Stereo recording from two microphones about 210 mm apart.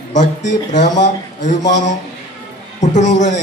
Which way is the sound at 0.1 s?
35° left (ahead or behind).